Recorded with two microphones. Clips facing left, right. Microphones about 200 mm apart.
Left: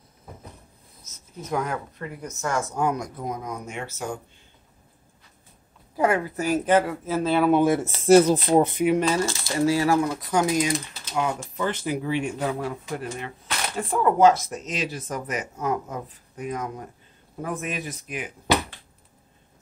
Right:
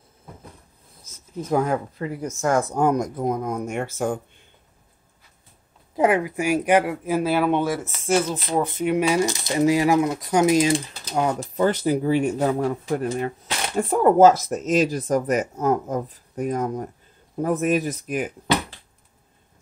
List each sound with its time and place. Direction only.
1.5 s speech: 30° right (ahead or behind)
2.5 s speech: 55° right (ahead or behind)
2.9 s speech: 45° right (ahead or behind)
5.9 s speech: 15° right (ahead or behind)
7.8 s speech: 35° left (ahead or behind)
8.5 s speech: 20° left (ahead or behind)
9.0 s speech: 15° right (ahead or behind)
11.1 s speech: 35° right (ahead or behind)